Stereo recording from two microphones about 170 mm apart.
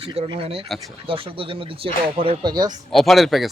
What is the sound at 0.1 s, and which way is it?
Speech, 30° right (ahead or behind).